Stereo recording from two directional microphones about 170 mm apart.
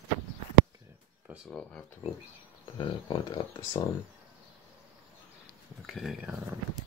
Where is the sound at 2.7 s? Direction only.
30° left (ahead or behind).